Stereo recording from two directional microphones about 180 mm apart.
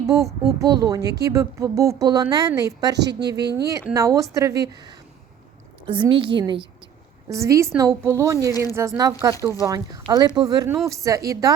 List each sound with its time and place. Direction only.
0.0 s a woman's voice: 15° right (ahead or behind)
3.1 s speech: 65° right (ahead or behind)
3.5 s a woman's voice: 20° right (ahead or behind)